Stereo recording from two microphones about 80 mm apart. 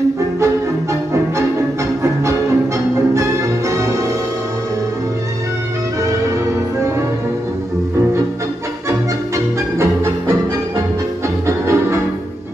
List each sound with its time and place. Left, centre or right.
9.8 s music: right
11.4 s music: right